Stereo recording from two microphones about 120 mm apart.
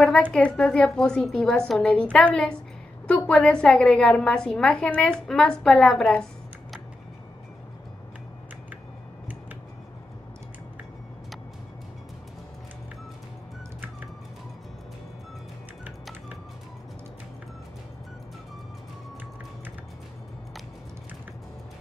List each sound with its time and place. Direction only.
0.0 s a woman's voice: 5° left (ahead or behind)